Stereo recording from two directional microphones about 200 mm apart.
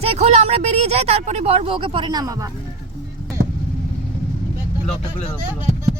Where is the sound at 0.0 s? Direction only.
30° right (ahead or behind).